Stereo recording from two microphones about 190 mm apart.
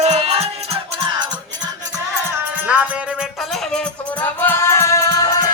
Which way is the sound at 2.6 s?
5° right (ahead or behind).